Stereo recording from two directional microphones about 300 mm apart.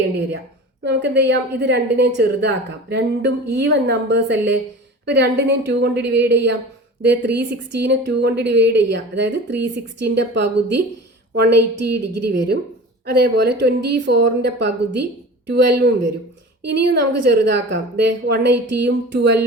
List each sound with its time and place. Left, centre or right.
0.9 s a woman's voice: right
11.5 s a woman's voice: right
13.1 s a woman's voice: right